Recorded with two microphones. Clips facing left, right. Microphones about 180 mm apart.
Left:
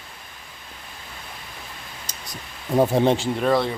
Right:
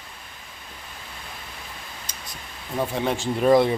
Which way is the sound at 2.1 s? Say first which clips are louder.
Left 1 dB; 40° left (ahead or behind).